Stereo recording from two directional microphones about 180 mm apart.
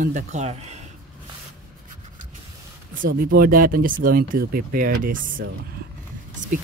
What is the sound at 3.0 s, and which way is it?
Speech, 55° right (ahead or behind).